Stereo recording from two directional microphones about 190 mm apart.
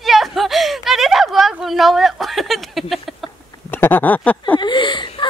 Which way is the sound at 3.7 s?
10° left (ahead or behind).